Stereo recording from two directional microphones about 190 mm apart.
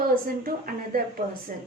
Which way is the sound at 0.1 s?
50° right (ahead or behind).